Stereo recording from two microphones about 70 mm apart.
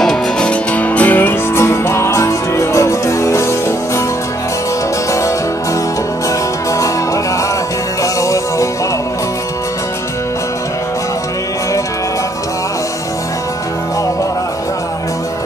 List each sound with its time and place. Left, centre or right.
0.0 s music: centre
0.5 s music: left
8.0 s music: left